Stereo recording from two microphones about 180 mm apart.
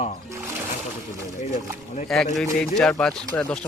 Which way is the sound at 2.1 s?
Centre (ahead or behind).